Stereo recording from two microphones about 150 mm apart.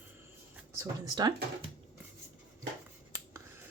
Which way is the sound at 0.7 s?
25° right (ahead or behind).